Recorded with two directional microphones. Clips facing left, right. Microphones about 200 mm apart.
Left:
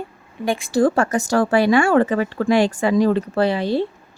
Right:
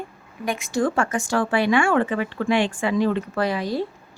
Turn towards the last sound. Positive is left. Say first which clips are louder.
# left 5 dB
turn(degrees=30)  # may be behind; listen again after turning